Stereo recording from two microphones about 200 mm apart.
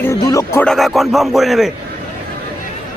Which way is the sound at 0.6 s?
Centre (ahead or behind).